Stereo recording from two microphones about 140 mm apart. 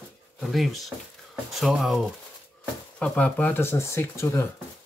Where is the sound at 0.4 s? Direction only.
Centre (ahead or behind).